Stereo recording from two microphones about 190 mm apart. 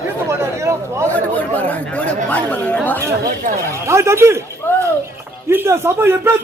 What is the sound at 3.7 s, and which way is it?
Speech, 15° right (ahead or behind).